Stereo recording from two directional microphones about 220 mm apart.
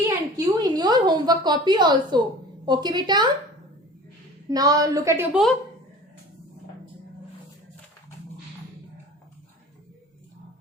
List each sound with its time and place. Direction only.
0.3 s a woman's voice: 15° right (ahead or behind)
4.4 s a woman's voice: 15° right (ahead or behind)